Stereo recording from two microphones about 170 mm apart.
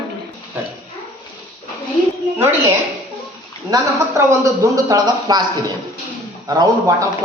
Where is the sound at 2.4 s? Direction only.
15° right (ahead or behind).